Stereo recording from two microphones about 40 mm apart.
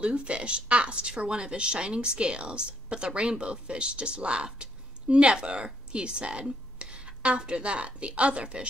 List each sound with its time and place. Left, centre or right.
0.0 s a woman's voice: right